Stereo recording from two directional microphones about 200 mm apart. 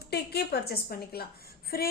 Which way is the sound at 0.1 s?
55° left (ahead or behind).